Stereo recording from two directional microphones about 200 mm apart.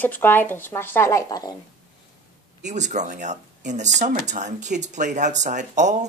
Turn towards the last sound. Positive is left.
turn(degrees=-35)  # may be behind; listen again after turning